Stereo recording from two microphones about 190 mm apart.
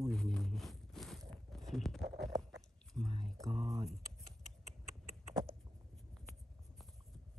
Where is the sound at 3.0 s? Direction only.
25° right (ahead or behind).